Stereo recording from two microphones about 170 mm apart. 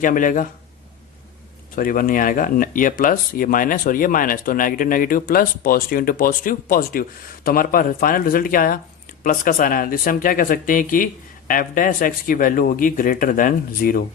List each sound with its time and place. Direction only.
0.0 s speech: 50° left (ahead or behind)
1.7 s speech: 55° left (ahead or behind)